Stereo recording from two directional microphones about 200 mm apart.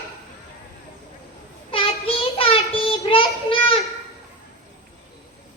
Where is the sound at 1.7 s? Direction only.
25° left (ahead or behind).